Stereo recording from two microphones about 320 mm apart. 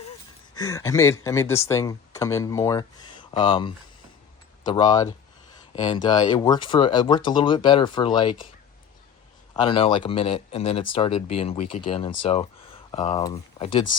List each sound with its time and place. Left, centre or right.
0.5 s speech: centre
9.6 s speech: centre